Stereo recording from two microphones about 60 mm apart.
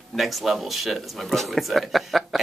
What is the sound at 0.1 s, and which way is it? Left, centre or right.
Speech, centre.